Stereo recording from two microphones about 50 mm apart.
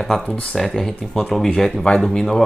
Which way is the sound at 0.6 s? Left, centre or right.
Centre.